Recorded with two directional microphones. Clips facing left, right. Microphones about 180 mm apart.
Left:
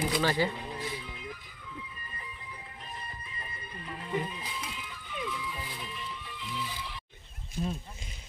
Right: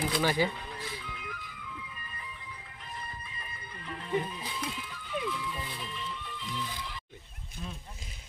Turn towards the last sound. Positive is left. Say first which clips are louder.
# left 9 dB
turn(degrees=30)  # may be behind; listen again after turning